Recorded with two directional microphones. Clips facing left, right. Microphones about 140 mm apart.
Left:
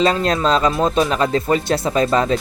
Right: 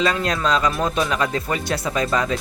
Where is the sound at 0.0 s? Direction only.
30° left (ahead or behind).